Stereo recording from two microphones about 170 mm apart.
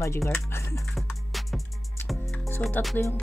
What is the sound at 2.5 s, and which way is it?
Speech, 10° left (ahead or behind).